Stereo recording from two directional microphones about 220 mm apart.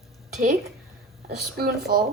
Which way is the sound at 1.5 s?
45° right (ahead or behind).